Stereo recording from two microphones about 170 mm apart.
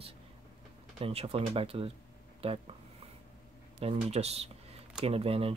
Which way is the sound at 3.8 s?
35° right (ahead or behind).